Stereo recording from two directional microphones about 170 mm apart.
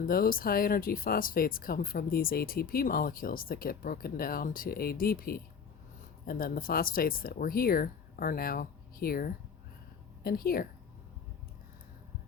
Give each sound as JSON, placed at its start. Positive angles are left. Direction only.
{"t": 0.0, "sound": "speech", "side_deg": 55}